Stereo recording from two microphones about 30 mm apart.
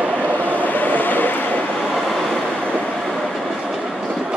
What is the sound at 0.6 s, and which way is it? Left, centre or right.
Vehicle, left.